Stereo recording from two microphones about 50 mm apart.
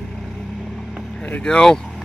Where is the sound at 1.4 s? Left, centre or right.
Centre.